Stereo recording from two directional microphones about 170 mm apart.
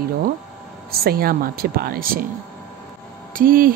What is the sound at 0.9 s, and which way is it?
A woman's voice, 60° right (ahead or behind).